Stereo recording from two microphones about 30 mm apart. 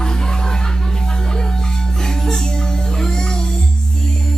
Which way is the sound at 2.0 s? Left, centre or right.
Centre.